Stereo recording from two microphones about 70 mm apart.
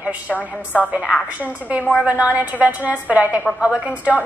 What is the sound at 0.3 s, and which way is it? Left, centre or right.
Speech, left.